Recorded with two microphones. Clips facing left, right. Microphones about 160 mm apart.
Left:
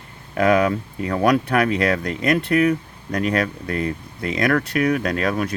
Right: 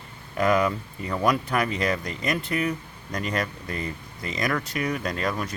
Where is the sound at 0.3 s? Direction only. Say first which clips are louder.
Left 5 dB; 65° left (ahead or behind).